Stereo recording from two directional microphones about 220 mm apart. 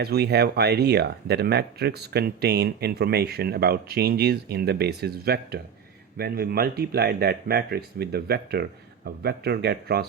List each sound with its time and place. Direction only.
0.0 s speech: 45° right (ahead or behind)